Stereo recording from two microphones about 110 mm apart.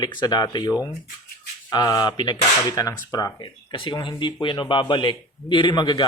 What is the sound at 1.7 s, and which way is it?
Speech, 35° left (ahead or behind).